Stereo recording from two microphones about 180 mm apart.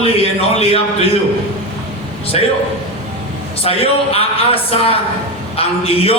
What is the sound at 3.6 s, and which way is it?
A man's voice, 35° left (ahead or behind).